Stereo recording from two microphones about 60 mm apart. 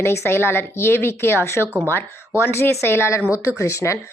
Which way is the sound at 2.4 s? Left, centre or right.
Left.